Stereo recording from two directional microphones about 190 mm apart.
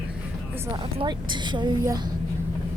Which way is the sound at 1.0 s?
25° right (ahead or behind).